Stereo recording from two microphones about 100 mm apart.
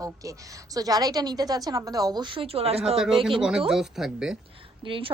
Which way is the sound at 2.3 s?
80° right.